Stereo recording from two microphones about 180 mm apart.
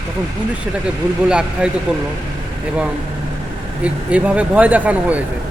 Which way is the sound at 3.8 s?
5° right (ahead or behind).